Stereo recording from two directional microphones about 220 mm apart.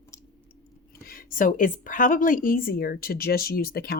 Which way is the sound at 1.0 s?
40° left (ahead or behind).